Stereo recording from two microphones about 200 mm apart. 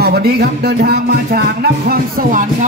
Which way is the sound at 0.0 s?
50° right (ahead or behind).